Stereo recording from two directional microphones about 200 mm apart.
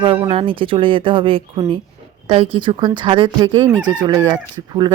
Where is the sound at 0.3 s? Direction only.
25° right (ahead or behind).